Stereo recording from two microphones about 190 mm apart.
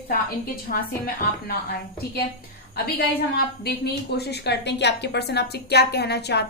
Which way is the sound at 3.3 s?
55° left (ahead or behind).